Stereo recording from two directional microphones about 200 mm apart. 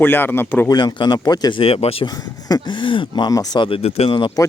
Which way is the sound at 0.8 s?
20° left (ahead or behind).